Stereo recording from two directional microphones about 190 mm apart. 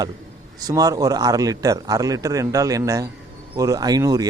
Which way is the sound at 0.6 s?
20° right (ahead or behind).